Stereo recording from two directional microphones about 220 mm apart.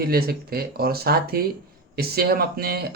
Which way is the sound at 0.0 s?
45° right (ahead or behind).